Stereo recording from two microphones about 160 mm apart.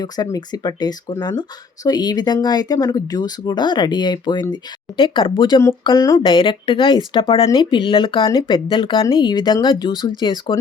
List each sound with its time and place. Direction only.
0.0 s speech: 25° left (ahead or behind)
6.2 s speech: 30° left (ahead or behind)